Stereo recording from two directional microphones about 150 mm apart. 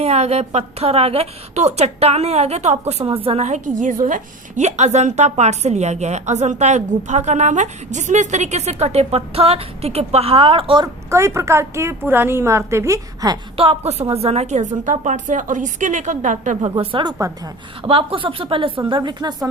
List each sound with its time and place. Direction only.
0.0 s a woman's voice: 45° right (ahead or behind)
11.1 s a woman's voice: 20° right (ahead or behind)
13.6 s a woman's voice: 40° right (ahead or behind); by 16.6 s 55° right (ahead or behind)
16.6 s speech: 40° right (ahead or behind); by 17.5 s 20° right (ahead or behind)
17.8 s speech: 35° right (ahead or behind)